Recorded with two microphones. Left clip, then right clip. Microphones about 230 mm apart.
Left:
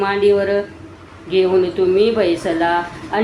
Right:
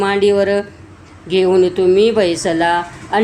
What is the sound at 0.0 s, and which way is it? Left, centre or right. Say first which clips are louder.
Speech: right 2 dB; right.